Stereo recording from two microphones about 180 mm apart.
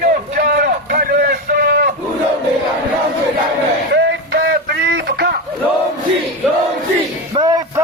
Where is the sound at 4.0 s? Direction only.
65° right (ahead or behind).